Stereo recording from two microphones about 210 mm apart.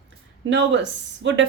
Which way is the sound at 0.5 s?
55° right (ahead or behind).